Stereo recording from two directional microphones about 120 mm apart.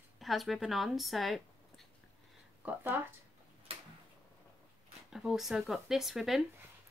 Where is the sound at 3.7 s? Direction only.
55° right (ahead or behind).